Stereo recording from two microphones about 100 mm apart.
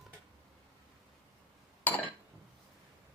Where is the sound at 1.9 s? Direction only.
15° left (ahead or behind).